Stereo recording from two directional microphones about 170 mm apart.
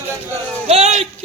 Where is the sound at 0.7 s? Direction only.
40° right (ahead or behind).